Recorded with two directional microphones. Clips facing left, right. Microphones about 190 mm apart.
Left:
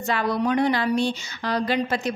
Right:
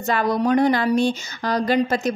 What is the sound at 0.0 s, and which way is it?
Speech, 45° right (ahead or behind).